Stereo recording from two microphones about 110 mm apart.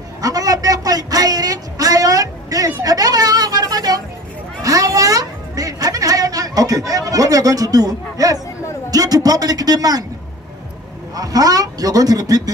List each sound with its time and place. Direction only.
0.2 s a sound: 35° right (ahead or behind)
8.9 s speech: 35° right (ahead or behind)
11.1 s speech: 35° right (ahead or behind)